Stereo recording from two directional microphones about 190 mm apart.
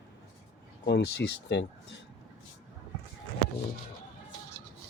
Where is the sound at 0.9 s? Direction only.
60° left (ahead or behind).